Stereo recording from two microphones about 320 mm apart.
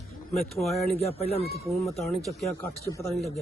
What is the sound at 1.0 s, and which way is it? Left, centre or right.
Speech, centre.